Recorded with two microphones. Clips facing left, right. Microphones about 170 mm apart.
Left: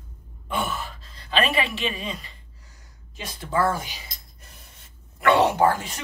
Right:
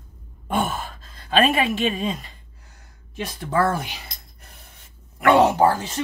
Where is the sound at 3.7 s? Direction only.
60° right (ahead or behind).